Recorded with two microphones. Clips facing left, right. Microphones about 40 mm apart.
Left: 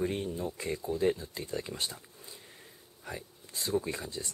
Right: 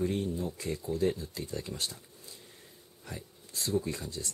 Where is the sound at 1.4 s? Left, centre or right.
Left.